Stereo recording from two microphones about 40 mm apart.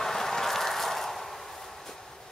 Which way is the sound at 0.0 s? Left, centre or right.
Centre.